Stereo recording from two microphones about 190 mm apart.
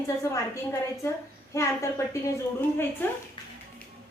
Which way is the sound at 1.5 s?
15° left (ahead or behind).